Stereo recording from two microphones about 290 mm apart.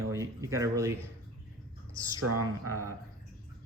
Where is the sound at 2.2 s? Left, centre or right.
Right.